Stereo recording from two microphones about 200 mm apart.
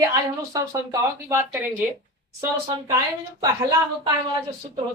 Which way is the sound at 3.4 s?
20° right (ahead or behind).